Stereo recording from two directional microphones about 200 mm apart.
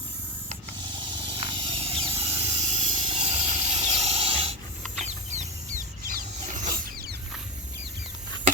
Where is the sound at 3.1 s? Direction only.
30° right (ahead or behind).